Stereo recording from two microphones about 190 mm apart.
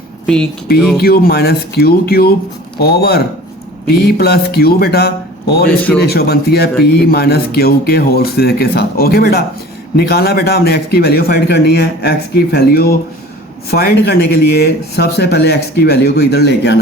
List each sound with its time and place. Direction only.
0.9 s a man's voice: 55° left (ahead or behind)